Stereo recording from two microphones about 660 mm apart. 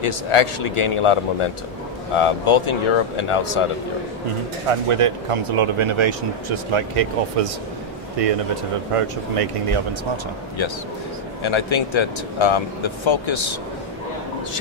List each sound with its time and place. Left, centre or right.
0.0 s speech: left
4.7 s speech: right
11.4 s speech: left